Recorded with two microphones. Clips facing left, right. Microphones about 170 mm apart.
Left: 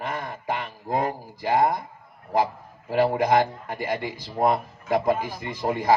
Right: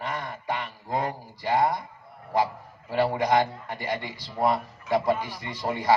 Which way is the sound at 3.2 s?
50° left (ahead or behind).